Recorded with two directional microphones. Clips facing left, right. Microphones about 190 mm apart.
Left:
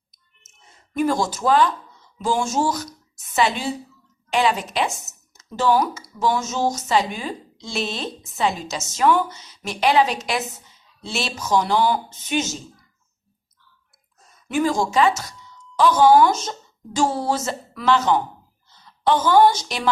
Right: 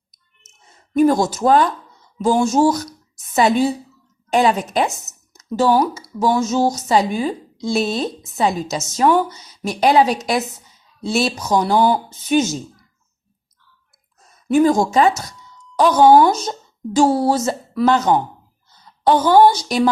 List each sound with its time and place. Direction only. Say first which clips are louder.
0.9 s a woman's voice: right 7 dB; 40° right (ahead or behind)
14.4 s speech: right 7 dB; 40° right (ahead or behind)
16.1 s speech: right 3 dB; 35° right (ahead or behind)